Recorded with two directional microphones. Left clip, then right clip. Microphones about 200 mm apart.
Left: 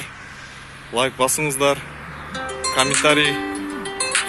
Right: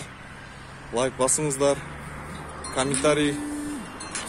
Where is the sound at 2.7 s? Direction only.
Centre (ahead or behind).